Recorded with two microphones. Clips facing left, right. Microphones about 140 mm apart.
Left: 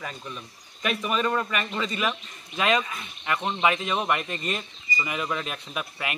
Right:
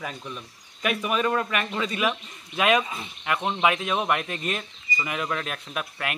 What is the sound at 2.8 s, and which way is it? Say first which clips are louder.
Speech: right 2 dB; 25° right (ahead or behind).